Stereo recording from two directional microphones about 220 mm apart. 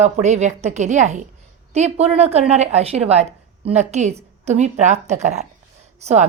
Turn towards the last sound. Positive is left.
turn(degrees=-30)  # may be behind; listen again after turning